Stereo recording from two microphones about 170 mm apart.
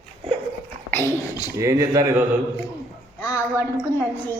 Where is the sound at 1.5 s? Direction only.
20° right (ahead or behind).